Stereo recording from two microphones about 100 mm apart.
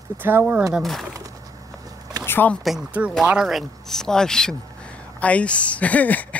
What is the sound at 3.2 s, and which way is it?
Speech, 5° right (ahead or behind).